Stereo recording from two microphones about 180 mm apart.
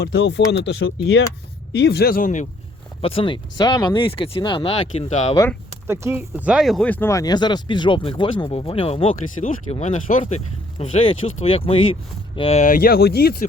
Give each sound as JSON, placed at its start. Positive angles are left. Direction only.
{"t": 0.0, "sound": "speech", "side_deg": 85}
{"t": 3.0, "sound": "speech", "side_deg": 30}
{"t": 5.9, "sound": "speech", "side_deg": -15}
{"t": 12.6, "sound": "speech", "side_deg": 50}